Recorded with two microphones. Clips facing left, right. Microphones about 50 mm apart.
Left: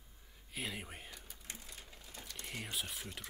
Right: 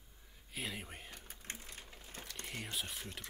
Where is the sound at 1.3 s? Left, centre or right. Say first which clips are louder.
Right 2 dB; right.